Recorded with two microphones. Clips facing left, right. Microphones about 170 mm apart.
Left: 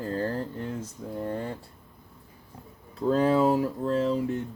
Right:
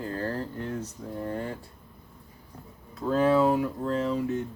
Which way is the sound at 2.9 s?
30° left (ahead or behind).